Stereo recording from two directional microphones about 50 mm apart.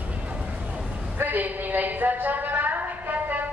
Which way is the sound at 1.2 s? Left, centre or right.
Right.